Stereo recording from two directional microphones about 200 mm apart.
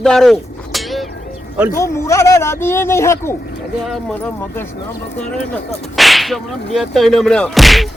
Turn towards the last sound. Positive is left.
turn(degrees=0)  # may be behind; listen again after turning